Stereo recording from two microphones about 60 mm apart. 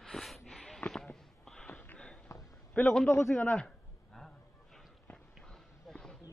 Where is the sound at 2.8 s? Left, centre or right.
Left.